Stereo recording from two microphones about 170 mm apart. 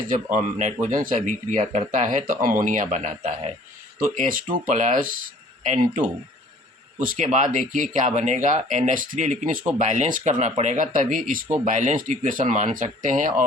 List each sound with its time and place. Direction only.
0.3 s speech: 45° right (ahead or behind)
3.9 s speech: 55° right (ahead or behind)
7.0 s speech: 50° right (ahead or behind)